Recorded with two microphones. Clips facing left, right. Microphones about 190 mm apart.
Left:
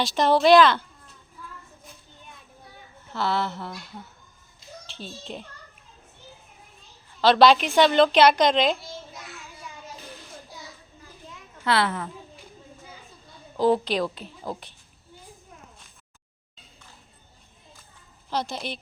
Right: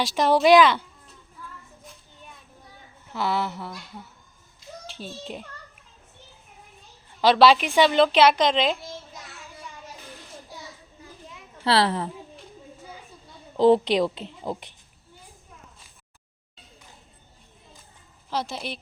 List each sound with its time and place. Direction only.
0.0 s speech: 10° right (ahead or behind)
3.1 s speech: 10° right (ahead or behind)
7.2 s a woman's voice: 10° right (ahead or behind)
11.6 s speech: 35° right (ahead or behind)
13.6 s a woman's voice: 25° right (ahead or behind)
18.3 s a woman's voice: 5° right (ahead or behind)